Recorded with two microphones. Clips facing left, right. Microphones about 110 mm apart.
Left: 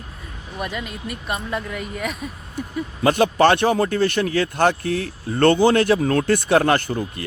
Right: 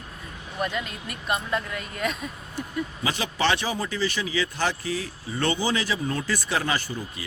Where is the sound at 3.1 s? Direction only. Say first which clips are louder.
Left 11 dB; 55° left (ahead or behind).